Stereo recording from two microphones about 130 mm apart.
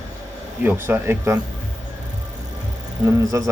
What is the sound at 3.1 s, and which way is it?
Speech, 25° right (ahead or behind).